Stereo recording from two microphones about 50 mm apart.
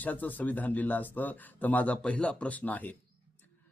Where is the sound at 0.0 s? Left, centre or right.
Left.